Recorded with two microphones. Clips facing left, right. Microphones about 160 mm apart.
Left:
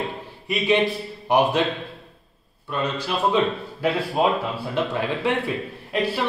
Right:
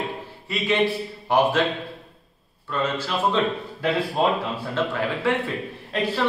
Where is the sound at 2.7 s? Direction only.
15° left (ahead or behind).